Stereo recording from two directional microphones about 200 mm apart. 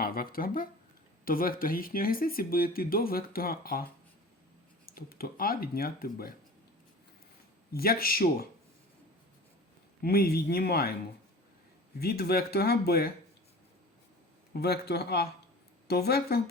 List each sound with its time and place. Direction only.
0.0 s speech: 45° left (ahead or behind)
4.9 s speech: 45° left (ahead or behind)
7.7 s speech: 50° left (ahead or behind)
10.0 s speech: 50° left (ahead or behind)
11.9 s speech: 50° left (ahead or behind)
14.5 s speech: 55° left (ahead or behind)